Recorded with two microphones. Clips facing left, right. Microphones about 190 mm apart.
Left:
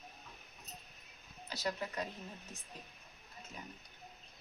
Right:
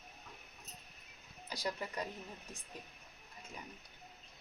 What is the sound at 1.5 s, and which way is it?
Speech, 15° right (ahead or behind).